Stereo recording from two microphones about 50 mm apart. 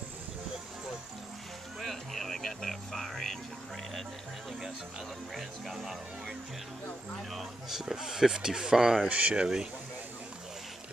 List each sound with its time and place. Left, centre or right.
1.8 s music: centre
5.3 s speech: centre
7.2 s a sound: centre
7.8 s speech: centre
9.1 s speech: right